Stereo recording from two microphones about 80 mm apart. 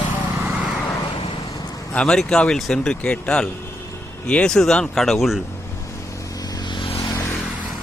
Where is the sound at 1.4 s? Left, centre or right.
Left.